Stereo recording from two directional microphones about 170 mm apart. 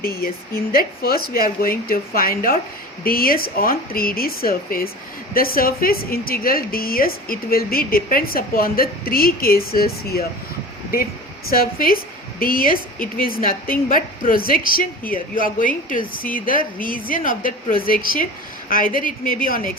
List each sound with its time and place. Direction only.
0.0 s a woman's voice: 60° left (ahead or behind)
11.4 s a woman's voice: 60° left (ahead or behind)